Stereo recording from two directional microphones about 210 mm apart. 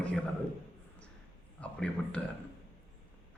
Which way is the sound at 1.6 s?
5° left (ahead or behind).